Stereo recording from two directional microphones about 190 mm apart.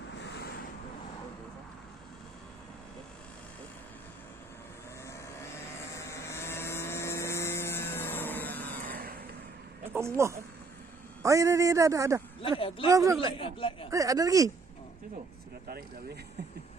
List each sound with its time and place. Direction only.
0.2 s vehicle: 60° left (ahead or behind)
5.0 s vehicle: 15° left (ahead or behind)
8.9 s vehicle: 50° right (ahead or behind)
9.8 s a man's voice: 15° right (ahead or behind)
12.4 s speech: 30° left (ahead or behind)
12.9 s a man's voice: 15° right (ahead or behind)
13.4 s speech: 30° left (ahead or behind)
13.9 s a man's voice: 15° right (ahead or behind)